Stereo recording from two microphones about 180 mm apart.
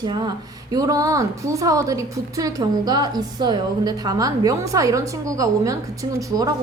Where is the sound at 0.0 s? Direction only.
20° right (ahead or behind).